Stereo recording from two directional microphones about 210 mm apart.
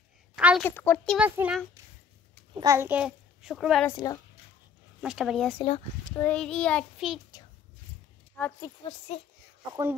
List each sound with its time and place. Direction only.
0.4 s a sound: 5° right (ahead or behind)
0.7 s speech: 10° left (ahead or behind)
1.1 s a child's voice: 5° right (ahead or behind)
3.8 s speech: 15° left (ahead or behind)
5.0 s child singing: 5° right (ahead or behind)
8.4 s speech: 5° left (ahead or behind)
8.6 s speech: 30° left (ahead or behind)